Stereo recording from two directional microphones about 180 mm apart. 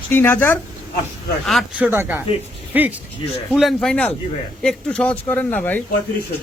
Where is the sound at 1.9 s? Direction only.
10° right (ahead or behind).